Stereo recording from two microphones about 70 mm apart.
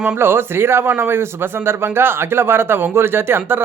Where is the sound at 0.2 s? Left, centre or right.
Right.